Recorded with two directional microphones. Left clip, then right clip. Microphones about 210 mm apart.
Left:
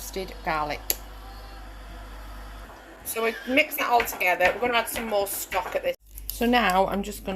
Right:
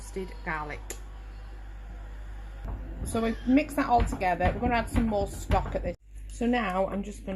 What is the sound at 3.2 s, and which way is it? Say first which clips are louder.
Speech: left 5 dB; 15° left (ahead or behind).